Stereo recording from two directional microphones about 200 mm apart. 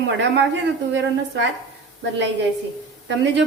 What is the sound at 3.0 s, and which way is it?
Speech, 65° right (ahead or behind).